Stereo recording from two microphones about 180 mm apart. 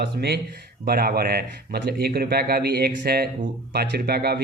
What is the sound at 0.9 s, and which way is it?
Speech, 55° right (ahead or behind).